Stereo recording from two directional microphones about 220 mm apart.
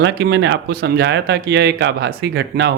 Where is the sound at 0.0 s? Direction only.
55° right (ahead or behind).